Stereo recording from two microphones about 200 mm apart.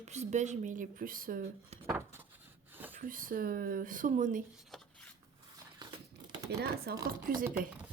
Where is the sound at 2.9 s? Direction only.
45° right (ahead or behind).